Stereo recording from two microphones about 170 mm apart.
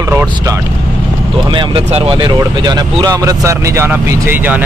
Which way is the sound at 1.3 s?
30° right (ahead or behind).